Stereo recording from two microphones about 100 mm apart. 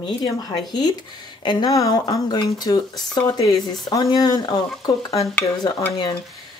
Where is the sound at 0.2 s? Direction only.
50° left (ahead or behind).